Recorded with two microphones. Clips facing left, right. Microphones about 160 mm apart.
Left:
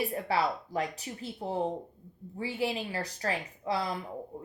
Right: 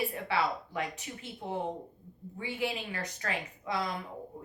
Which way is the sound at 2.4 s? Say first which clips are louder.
Left 3 dB; 35° left (ahead or behind).